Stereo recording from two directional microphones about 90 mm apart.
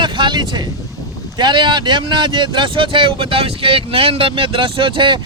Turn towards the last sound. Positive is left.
turn(degrees=-65)  # may be behind; listen again after turning